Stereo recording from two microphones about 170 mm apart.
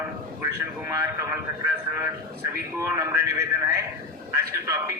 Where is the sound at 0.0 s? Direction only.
15° right (ahead or behind).